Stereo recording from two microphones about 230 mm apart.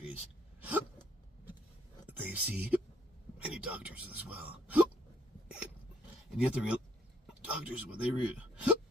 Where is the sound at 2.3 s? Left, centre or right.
Centre.